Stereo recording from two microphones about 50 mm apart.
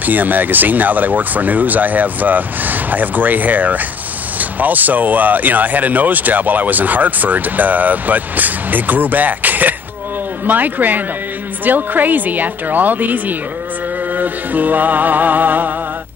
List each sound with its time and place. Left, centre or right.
0.0 s speech: right